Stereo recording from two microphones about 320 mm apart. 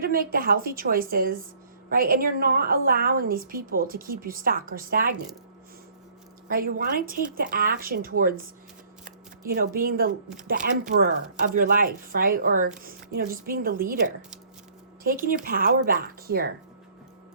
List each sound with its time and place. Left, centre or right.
0.0 s a woman's voice: right
6.5 s a woman's voice: right
15.0 s a woman's voice: right